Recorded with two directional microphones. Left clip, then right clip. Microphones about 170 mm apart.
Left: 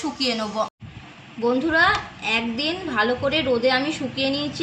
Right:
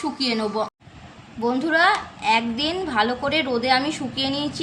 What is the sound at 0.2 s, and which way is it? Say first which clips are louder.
A woman's voice: left 1 dB; 15° right (ahead or behind).